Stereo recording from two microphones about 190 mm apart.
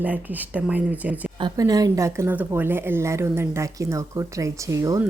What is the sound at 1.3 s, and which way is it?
Speech, 20° right (ahead or behind).